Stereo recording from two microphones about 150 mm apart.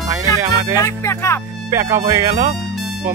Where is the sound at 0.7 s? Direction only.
20° left (ahead or behind).